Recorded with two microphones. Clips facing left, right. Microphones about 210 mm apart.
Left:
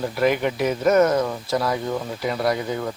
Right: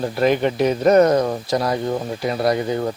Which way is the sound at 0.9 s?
35° right (ahead or behind).